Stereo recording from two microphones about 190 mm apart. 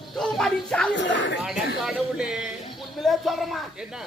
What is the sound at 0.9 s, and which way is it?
Speech, 70° left (ahead or behind).